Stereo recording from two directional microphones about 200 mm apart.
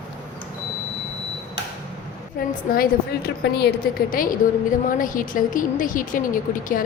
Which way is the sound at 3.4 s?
55° left (ahead or behind).